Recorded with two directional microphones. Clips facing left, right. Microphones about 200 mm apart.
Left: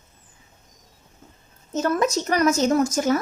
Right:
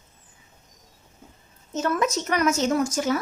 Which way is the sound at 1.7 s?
40° left (ahead or behind).